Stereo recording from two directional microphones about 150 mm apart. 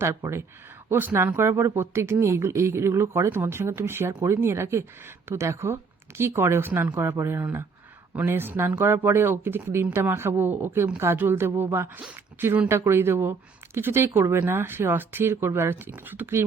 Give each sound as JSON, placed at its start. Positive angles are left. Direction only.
{"t": 0.0, "sound": "speech", "side_deg": -15}